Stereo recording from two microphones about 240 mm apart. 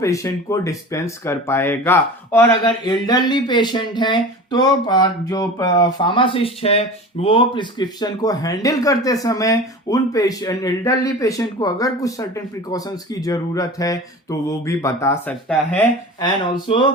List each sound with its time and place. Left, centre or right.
0.0 s speech: centre
16.2 s speech: centre